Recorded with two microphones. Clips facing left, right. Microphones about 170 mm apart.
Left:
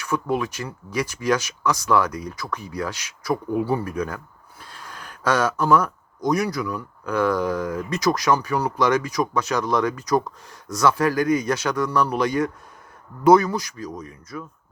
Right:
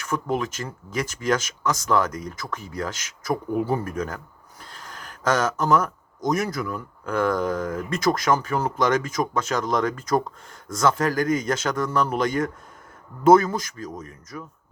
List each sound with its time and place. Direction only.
0.1 s speech: 45° right (ahead or behind)